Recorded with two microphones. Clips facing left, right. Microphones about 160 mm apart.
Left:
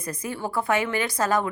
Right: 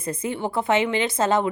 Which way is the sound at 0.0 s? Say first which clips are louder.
Right 4 dB; 25° right (ahead or behind).